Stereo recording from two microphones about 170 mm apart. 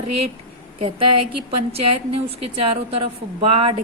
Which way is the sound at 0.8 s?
30° right (ahead or behind).